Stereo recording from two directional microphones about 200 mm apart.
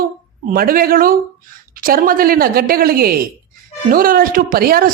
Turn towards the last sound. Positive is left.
turn(degrees=-45)  # may be behind; listen again after turning